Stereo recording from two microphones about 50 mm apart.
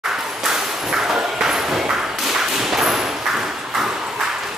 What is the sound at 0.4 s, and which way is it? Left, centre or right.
Ping, centre.